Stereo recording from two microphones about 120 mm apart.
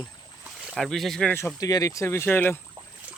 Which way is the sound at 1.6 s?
30° left (ahead or behind).